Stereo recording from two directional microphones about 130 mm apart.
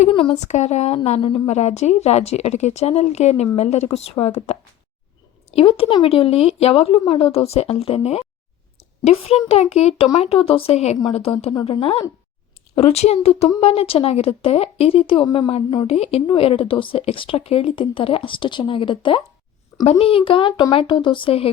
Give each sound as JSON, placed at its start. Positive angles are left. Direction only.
{"t": 0.1, "sound": "a sound", "side_deg": 45}
{"t": 0.3, "sound": "speech", "side_deg": 60}
{"t": 15.9, "sound": "speech", "side_deg": 50}